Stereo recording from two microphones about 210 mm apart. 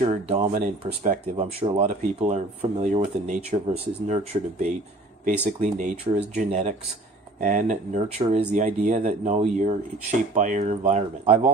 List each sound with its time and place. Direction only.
0.0 s speech: 35° right (ahead or behind)